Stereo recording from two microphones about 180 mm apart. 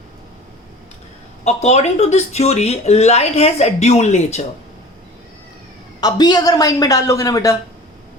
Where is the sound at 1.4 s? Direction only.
40° left (ahead or behind).